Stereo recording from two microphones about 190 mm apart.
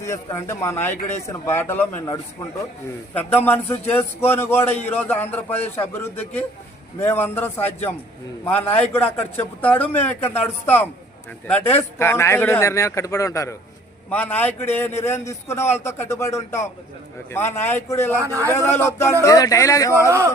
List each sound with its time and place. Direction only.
0.0 s a man's voice: 15° left (ahead or behind)
3.2 s a man's voice: 10° left (ahead or behind)
18.2 s a man's voice: 15° right (ahead or behind)
18.5 s a man's voice: 15° left (ahead or behind)
20.1 s a man's voice: 15° right (ahead or behind)